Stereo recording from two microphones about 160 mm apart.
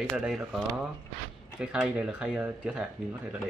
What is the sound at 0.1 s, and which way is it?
Speech, 5° right (ahead or behind).